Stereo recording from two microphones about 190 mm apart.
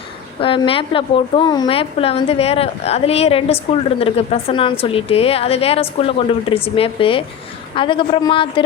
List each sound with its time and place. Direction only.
0.3 s a woman's voice: 25° left (ahead or behind)